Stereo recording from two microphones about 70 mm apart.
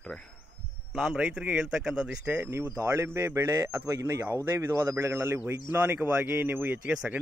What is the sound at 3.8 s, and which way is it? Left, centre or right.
A man's voice, right.